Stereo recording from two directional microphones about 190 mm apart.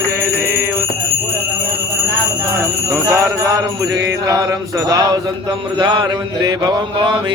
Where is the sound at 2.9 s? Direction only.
15° right (ahead or behind).